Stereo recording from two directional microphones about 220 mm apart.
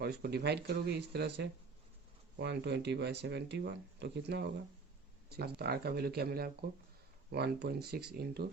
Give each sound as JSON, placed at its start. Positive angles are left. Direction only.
{"t": 0.0, "sound": "speech", "side_deg": -45}